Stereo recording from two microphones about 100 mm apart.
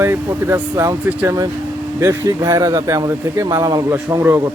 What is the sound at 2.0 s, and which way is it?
Speech, 35° right (ahead or behind).